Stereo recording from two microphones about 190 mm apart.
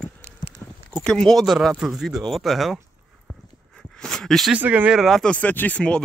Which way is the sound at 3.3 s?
5° left (ahead or behind).